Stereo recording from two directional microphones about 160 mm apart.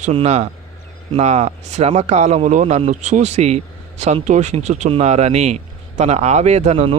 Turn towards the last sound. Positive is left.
turn(degrees=-40)  # may be behind; listen again after turning